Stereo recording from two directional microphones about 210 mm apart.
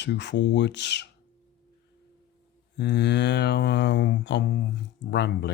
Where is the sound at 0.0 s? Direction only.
55° left (ahead or behind).